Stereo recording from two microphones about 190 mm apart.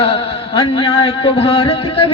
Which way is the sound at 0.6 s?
25° left (ahead or behind).